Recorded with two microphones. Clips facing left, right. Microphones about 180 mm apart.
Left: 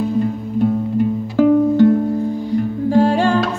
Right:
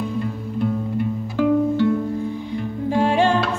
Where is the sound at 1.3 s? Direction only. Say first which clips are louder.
Left 5 dB; 45° left (ahead or behind).